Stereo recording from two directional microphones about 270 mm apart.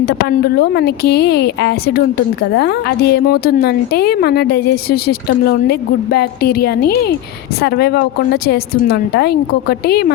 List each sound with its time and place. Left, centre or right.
0.0 s a woman's voice: left